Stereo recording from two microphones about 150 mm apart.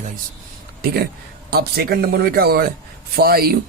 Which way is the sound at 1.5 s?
90° right.